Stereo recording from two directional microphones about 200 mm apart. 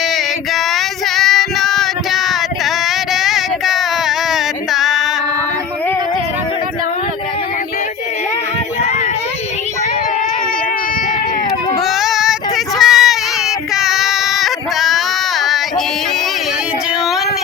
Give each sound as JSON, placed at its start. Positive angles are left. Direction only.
{"t": 0.5, "sound": "female singing", "side_deg": 0}
{"t": 11.8, "sound": "child singing", "side_deg": 0}